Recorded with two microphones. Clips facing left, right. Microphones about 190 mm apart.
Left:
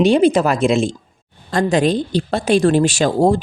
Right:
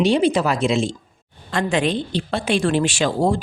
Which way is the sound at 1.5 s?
40° left (ahead or behind).